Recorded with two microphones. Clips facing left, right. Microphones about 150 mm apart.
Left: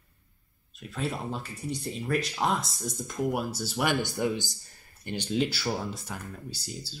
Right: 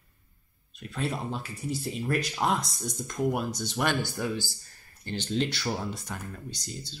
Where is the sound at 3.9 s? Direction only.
20° left (ahead or behind).